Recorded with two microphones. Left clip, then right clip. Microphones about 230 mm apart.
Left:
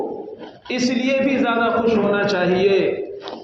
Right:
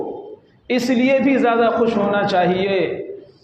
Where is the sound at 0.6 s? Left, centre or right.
Right.